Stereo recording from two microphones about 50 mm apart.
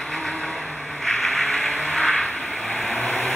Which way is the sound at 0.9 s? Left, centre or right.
Centre.